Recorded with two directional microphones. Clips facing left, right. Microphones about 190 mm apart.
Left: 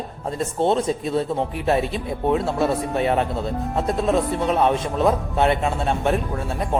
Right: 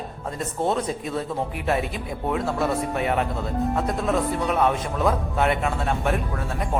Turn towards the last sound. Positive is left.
turn(degrees=30)  # may be behind; listen again after turning